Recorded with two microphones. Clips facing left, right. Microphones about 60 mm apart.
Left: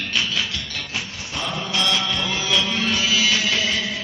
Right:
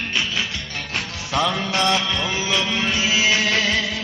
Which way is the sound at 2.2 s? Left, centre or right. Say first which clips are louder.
Even; right.